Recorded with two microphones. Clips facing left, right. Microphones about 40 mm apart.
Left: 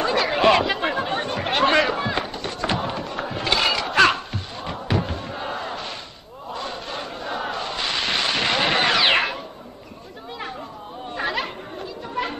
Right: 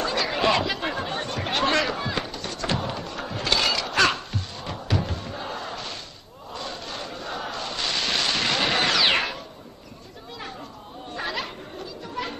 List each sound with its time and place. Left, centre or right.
0.0 s chatter: centre
6.5 s a sound: centre
11.1 s chatter: left